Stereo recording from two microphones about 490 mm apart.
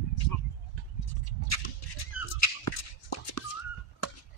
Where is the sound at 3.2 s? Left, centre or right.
Left.